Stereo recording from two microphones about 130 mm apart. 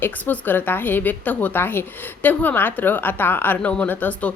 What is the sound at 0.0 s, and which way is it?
A woman's voice, 15° left (ahead or behind).